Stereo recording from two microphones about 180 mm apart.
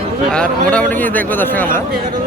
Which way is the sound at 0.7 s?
10° left (ahead or behind).